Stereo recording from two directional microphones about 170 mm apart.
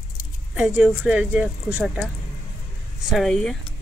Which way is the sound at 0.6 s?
5° right (ahead or behind).